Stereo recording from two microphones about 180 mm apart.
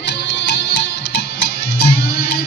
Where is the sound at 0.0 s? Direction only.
70° left (ahead or behind).